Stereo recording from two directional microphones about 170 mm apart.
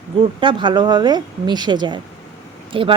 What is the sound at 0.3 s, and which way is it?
Speech, 25° right (ahead or behind).